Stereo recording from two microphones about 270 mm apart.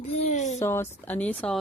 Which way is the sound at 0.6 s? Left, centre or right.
Centre.